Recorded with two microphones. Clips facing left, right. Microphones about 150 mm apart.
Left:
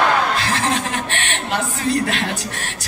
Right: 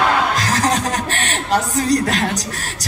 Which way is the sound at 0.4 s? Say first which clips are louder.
Right 3 dB; 40° right (ahead or behind).